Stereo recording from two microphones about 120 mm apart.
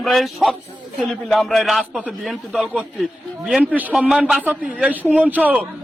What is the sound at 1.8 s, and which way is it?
A man's voice, 10° right (ahead or behind).